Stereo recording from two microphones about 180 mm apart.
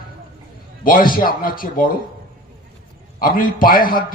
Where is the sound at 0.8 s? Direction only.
50° left (ahead or behind).